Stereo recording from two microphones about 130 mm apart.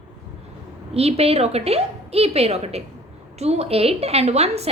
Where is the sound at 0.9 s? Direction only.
50° right (ahead or behind).